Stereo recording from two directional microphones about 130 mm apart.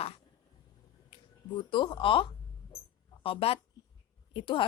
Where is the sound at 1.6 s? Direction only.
40° left (ahead or behind).